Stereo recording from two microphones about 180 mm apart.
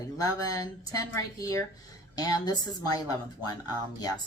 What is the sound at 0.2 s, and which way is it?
A woman's voice, 20° left (ahead or behind).